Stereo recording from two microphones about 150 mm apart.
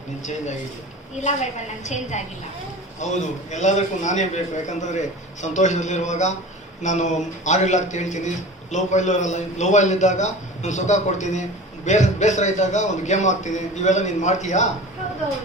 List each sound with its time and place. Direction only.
1.2 s a man's voice: 50° left (ahead or behind)